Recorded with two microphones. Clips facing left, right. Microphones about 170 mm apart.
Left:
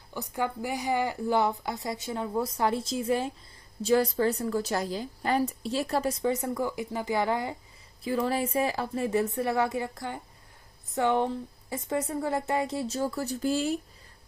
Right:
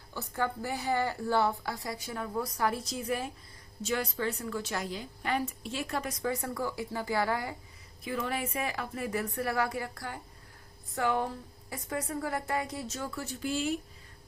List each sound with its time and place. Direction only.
0.1 s a woman's voice: 15° left (ahead or behind)
8.0 s a woman's voice: 30° left (ahead or behind)